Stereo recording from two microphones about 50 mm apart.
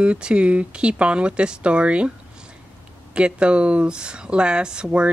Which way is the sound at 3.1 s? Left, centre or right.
Right.